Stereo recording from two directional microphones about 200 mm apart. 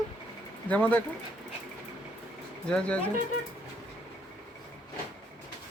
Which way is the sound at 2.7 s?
5° left (ahead or behind).